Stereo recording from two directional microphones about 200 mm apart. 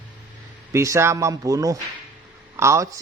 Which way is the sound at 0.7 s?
15° right (ahead or behind).